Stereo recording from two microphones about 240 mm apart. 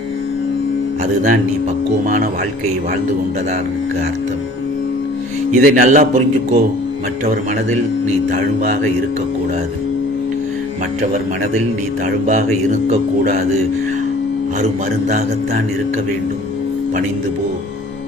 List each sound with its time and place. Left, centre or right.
1.0 s a man's voice: right
5.5 s a man's voice: right
8.3 s a man's voice: right